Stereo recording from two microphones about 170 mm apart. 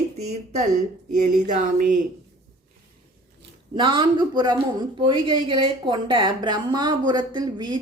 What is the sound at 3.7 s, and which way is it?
A woman's voice, 30° right (ahead or behind).